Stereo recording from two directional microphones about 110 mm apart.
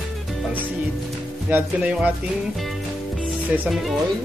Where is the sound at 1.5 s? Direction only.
10° right (ahead or behind).